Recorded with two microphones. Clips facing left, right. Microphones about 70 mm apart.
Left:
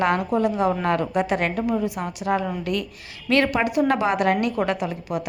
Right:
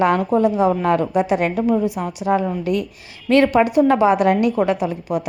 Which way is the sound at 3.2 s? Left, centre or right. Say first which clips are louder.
Right 6 dB; right.